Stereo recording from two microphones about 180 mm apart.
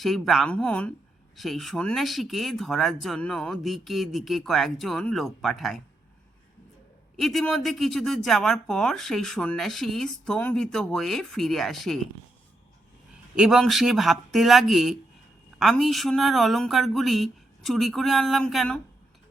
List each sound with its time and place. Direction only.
0.0 s speech: centre (ahead or behind)
7.2 s speech: centre (ahead or behind)
13.3 s speech: 5° right (ahead or behind)